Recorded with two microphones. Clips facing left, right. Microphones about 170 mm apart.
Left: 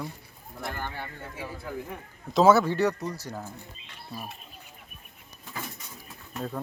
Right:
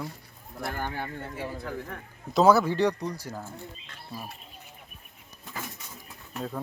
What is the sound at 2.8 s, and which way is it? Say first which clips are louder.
Speech: right 1 dB; 15° right (ahead or behind).